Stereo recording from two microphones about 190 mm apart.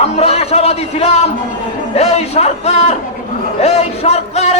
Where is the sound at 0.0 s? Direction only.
30° left (ahead or behind).